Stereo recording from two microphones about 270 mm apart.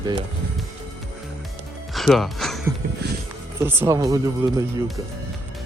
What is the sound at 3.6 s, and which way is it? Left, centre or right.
Speech, centre.